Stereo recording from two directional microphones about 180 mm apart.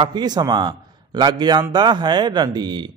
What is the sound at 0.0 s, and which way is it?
A man's voice, 25° right (ahead or behind).